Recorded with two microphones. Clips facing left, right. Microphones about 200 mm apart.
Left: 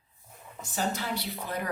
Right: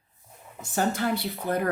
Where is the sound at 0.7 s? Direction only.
50° right (ahead or behind).